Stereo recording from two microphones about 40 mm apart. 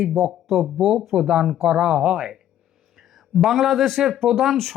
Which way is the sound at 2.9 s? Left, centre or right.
Centre.